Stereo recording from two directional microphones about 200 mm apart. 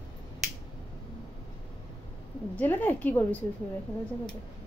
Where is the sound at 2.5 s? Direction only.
10° left (ahead or behind).